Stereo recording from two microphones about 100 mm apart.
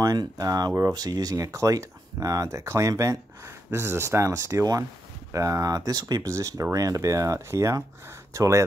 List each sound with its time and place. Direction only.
0.0 s speech: 35° right (ahead or behind)